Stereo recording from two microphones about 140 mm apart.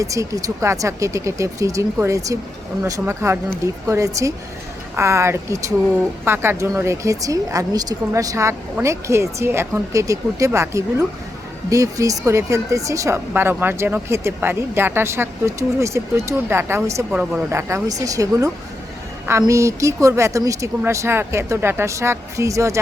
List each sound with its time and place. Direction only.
0.0 s speech: 20° right (ahead or behind)
17.1 s speech: 5° right (ahead or behind)
17.5 s speech: 20° right (ahead or behind)